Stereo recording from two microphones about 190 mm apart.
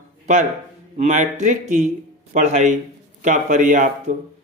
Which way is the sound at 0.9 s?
40° right (ahead or behind).